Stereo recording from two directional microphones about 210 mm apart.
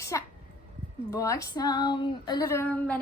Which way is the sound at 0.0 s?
15° left (ahead or behind).